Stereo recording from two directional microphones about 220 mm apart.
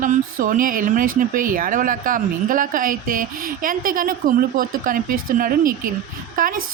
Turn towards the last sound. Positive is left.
turn(degrees=-40)  # may be behind; listen again after turning